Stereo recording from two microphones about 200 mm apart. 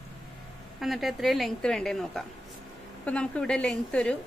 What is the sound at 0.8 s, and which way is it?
Speech, centre (ahead or behind).